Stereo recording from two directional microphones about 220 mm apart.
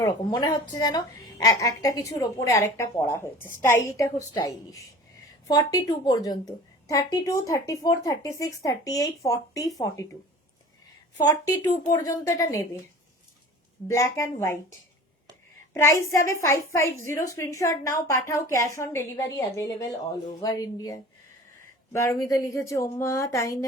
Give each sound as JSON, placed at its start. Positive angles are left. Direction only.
{"t": 0.0, "sound": "a woman's voice", "side_deg": 20}
{"t": 11.3, "sound": "a woman's voice", "side_deg": 15}
{"t": 13.8, "sound": "a woman's voice", "side_deg": 15}
{"t": 15.7, "sound": "a woman's voice", "side_deg": 15}